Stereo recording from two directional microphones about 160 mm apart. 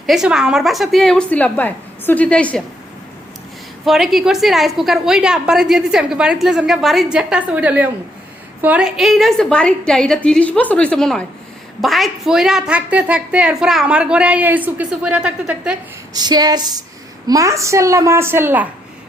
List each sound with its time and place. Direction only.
0.0 s a woman's voice: 5° right (ahead or behind)
3.8 s a woman's voice: centre (ahead or behind)
16.1 s a woman's voice: 25° right (ahead or behind)